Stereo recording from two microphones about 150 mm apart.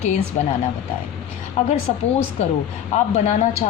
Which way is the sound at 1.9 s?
35° left (ahead or behind).